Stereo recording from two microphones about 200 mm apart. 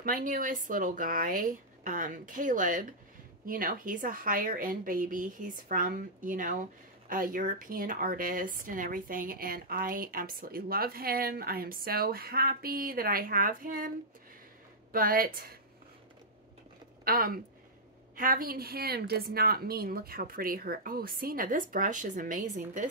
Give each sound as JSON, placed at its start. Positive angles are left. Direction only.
{"t": 0.0, "sound": "a woman's voice", "side_deg": -45}
{"t": 17.0, "sound": "a woman's voice", "side_deg": -45}